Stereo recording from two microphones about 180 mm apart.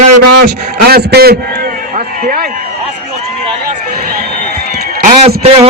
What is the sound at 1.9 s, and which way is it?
Run, 50° right (ahead or behind).